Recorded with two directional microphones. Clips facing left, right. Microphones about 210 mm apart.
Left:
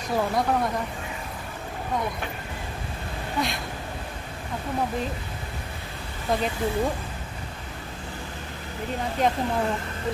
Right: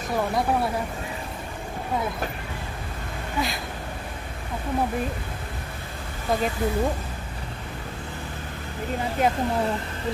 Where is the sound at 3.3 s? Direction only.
Centre (ahead or behind).